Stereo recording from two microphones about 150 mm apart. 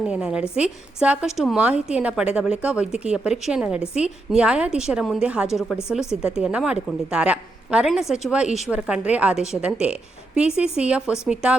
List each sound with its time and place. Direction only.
0.0 s a woman's voice: 5° right (ahead or behind)